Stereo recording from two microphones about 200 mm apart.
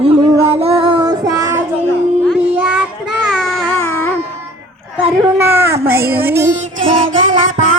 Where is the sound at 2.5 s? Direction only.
5° right (ahead or behind).